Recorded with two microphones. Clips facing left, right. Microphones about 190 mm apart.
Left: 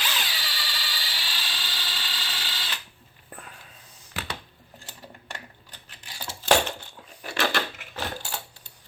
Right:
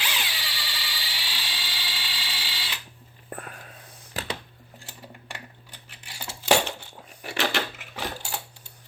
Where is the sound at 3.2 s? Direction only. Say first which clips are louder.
Right 6 dB; 55° right (ahead or behind).